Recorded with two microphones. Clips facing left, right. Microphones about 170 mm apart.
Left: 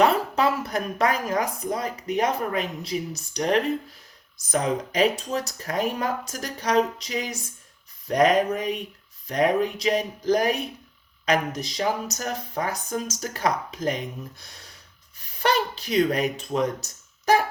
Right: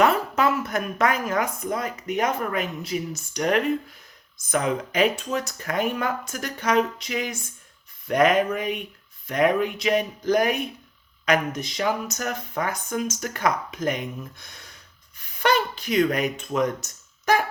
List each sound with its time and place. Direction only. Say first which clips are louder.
0.0 s a woman's voice: even; 35° left (ahead or behind)